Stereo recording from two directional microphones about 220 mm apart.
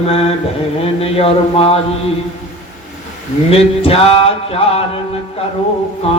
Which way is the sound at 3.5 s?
25° left (ahead or behind).